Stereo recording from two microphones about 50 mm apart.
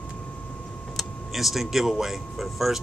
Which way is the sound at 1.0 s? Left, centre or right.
Centre.